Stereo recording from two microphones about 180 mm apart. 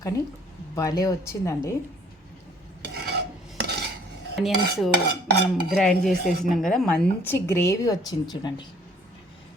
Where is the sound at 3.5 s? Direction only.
65° right (ahead or behind).